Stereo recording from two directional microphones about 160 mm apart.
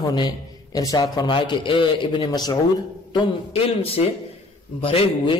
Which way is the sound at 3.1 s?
35° left (ahead or behind).